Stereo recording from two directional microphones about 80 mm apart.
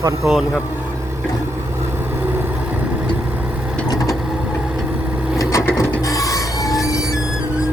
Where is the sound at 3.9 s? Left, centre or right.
Left.